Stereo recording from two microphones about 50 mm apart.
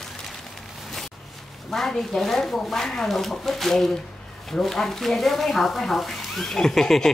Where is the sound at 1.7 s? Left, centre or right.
Centre.